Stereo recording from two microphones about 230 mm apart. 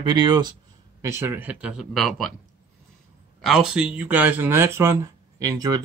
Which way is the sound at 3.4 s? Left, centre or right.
Centre.